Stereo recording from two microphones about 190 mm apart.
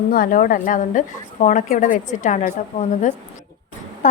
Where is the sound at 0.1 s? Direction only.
45° left (ahead or behind).